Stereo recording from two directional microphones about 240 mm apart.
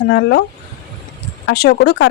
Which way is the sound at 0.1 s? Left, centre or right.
Left.